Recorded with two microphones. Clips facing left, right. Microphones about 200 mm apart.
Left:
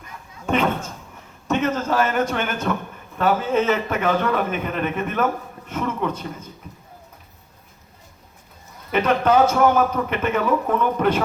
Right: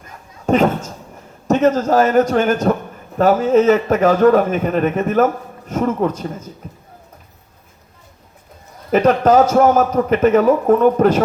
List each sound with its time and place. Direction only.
0.4 s a man's voice: 40° right (ahead or behind)
8.9 s a man's voice: 40° right (ahead or behind)